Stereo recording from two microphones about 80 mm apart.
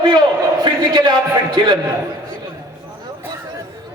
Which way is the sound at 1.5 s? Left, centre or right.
Right.